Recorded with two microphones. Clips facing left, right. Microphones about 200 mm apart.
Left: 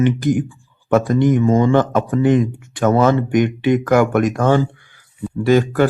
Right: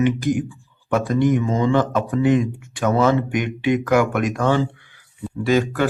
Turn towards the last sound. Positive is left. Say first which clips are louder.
# left 4 dB
turn(degrees=45)  # may be behind; listen again after turning